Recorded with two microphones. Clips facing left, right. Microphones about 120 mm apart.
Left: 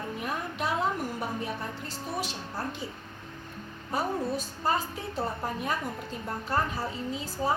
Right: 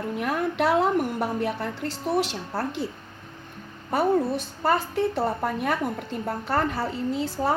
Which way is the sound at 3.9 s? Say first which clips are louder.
Right 7 dB; 65° right (ahead or behind).